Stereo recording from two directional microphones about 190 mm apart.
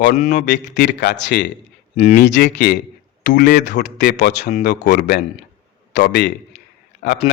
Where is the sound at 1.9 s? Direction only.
35° left (ahead or behind).